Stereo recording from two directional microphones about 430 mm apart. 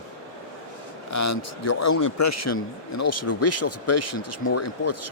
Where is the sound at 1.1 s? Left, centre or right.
Left.